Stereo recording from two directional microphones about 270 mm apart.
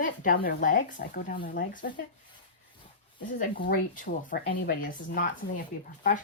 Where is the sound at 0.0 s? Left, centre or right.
Left.